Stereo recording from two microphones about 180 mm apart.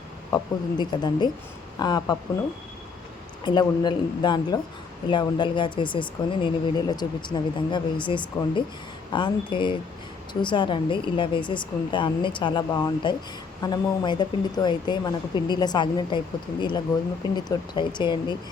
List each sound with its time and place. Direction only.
0.3 s speech: 25° left (ahead or behind)
3.4 s speech: 25° left (ahead or behind)